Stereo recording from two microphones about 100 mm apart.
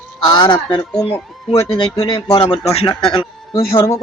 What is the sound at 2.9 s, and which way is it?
Speech, 60° left (ahead or behind).